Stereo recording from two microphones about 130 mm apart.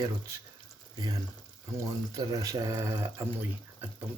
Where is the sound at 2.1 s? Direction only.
25° right (ahead or behind).